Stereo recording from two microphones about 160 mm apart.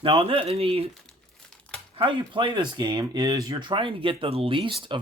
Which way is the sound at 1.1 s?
5° left (ahead or behind).